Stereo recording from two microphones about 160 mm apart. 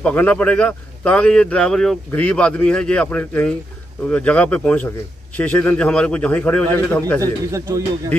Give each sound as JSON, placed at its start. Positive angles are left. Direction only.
{"t": 0.0, "sound": "a man's voice", "side_deg": 10}
{"t": 7.2, "sound": "a man's voice", "side_deg": -20}